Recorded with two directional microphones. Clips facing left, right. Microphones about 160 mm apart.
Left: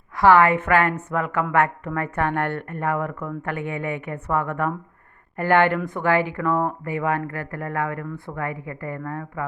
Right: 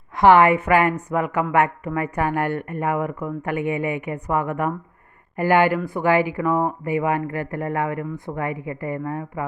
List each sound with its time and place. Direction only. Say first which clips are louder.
0.2 s speech: right 2 dB; 20° right (ahead or behind)